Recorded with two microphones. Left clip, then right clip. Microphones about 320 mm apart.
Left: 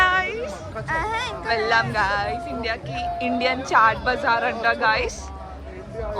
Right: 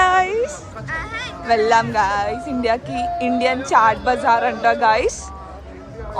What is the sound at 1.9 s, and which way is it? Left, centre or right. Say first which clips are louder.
A woman's voice: right 4 dB; centre.